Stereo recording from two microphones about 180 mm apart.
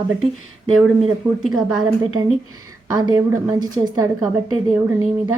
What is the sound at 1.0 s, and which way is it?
Speech, centre (ahead or behind).